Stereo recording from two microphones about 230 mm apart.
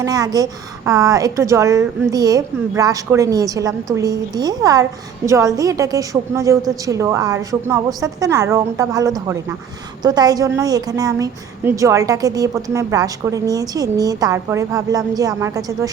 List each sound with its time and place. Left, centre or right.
0.0 s a woman's voice: centre